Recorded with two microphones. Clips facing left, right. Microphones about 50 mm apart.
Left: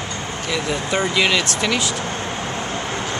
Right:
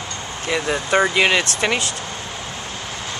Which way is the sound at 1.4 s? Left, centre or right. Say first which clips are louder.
Even; right.